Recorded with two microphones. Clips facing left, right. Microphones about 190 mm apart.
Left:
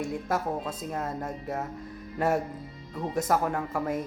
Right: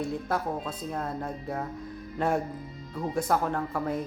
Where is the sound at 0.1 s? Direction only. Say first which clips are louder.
Left 1 dB; 10° left (ahead or behind).